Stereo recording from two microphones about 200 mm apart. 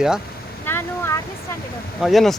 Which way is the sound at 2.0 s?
Centre (ahead or behind).